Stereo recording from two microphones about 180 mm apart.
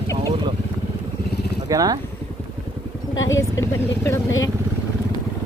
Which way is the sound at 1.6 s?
20° right (ahead or behind).